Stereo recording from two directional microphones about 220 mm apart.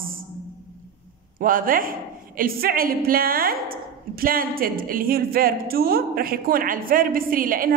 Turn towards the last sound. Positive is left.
turn(degrees=-40)  # may be behind; listen again after turning